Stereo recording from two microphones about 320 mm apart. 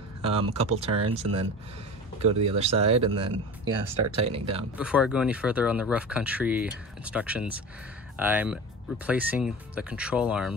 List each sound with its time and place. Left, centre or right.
0.2 s speech: centre
4.7 s speech: centre